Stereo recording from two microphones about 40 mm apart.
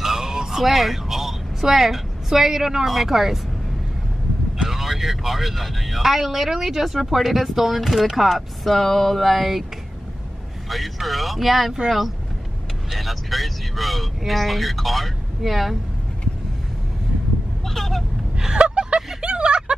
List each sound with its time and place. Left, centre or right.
0.0 s a sound: centre
0.6 s a woman's voice: centre
4.6 s speech: centre
10.7 s speech: centre
12.9 s speech: centre
17.6 s vehicle: centre
18.5 s vehicle: right
19.2 s a sound: right